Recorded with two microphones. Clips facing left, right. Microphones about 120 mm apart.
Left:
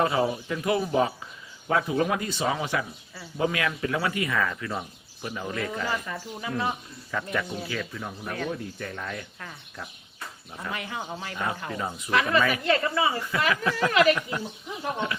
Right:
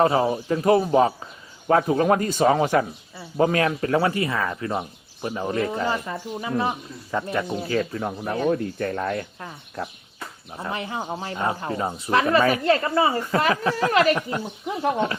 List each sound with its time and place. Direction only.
0.0 s speech: 35° right (ahead or behind)
10.5 s speech: 30° right (ahead or behind)
14.7 s speech: 65° right (ahead or behind)